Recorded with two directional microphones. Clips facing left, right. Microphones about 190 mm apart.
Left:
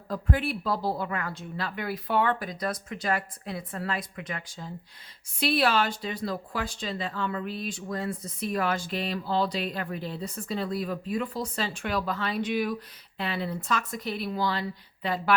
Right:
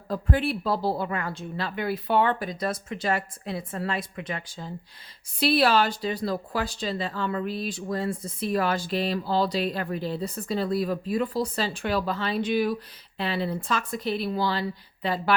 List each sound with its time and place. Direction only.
0.1 s speech: 30° right (ahead or behind)